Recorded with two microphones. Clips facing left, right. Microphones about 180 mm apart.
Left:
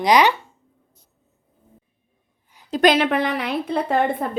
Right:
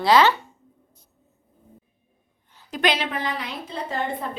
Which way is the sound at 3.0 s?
65° left (ahead or behind).